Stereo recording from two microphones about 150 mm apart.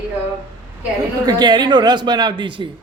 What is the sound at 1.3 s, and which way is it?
A woman's voice, 30° right (ahead or behind).